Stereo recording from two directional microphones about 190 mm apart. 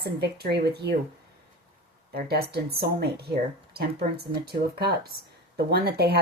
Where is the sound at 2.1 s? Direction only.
55° right (ahead or behind).